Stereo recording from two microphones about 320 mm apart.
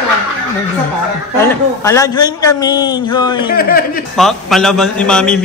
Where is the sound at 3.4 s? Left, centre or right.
Left.